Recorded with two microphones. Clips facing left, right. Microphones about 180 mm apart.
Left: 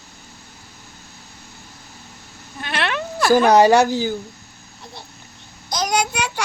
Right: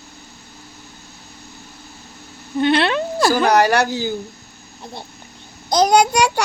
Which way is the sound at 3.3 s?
20° left (ahead or behind).